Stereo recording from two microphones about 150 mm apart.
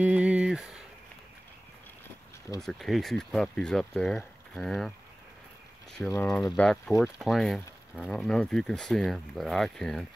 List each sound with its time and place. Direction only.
0.0 s a sound: 10° right (ahead or behind)
2.6 s speech: centre (ahead or behind)
6.1 s speech: 20° left (ahead or behind)
6.5 s speech: 5° left (ahead or behind)